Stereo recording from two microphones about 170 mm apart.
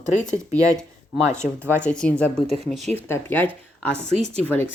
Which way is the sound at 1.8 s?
5° left (ahead or behind).